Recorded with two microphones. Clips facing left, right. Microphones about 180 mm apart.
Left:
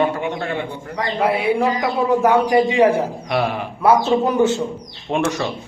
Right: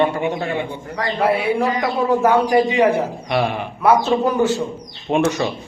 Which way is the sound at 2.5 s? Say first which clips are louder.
Left 1 dB; 25° left (ahead or behind).